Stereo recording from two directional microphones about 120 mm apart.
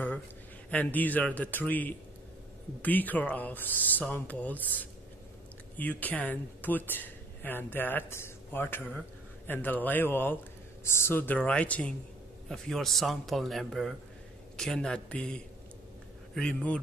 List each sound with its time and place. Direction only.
0.7 s a man's voice: 15° left (ahead or behind)
16.3 s speech: 10° left (ahead or behind)